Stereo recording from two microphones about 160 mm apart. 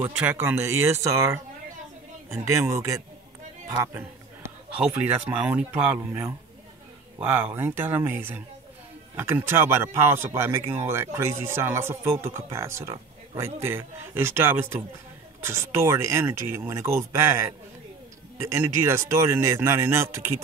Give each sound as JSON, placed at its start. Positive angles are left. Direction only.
{"t": 0.2, "sound": "speech", "side_deg": -10}
{"t": 2.6, "sound": "a man's voice", "side_deg": -20}
{"t": 3.9, "sound": "a man's voice", "side_deg": -10}